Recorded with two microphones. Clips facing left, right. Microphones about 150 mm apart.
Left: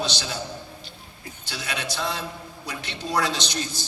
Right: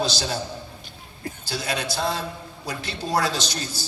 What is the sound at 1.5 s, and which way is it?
A man's voice, 35° right (ahead or behind).